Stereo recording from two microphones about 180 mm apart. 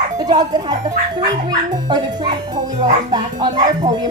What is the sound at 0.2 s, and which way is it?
Speech, 20° right (ahead or behind).